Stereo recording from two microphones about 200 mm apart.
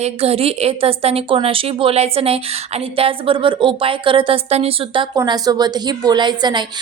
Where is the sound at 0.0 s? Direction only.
30° right (ahead or behind).